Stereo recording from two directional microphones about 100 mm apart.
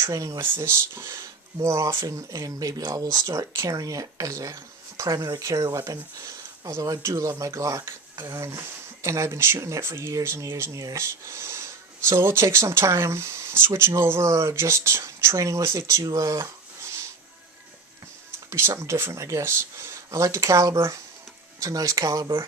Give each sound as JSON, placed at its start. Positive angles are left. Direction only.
{"t": 0.0, "sound": "speech", "side_deg": -30}
{"t": 0.4, "sound": "speech", "side_deg": -20}
{"t": 16.0, "sound": "a sound", "side_deg": -35}
{"t": 18.5, "sound": "speech", "side_deg": -30}